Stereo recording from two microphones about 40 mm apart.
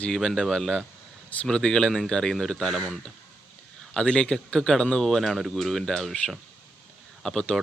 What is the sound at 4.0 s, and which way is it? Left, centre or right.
Speech, left.